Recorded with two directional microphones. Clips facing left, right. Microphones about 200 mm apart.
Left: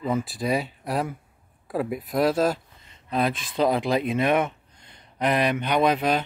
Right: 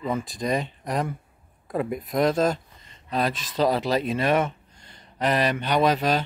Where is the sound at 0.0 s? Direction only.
5° left (ahead or behind).